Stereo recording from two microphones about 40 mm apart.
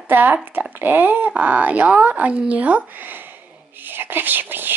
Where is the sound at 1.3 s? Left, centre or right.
Right.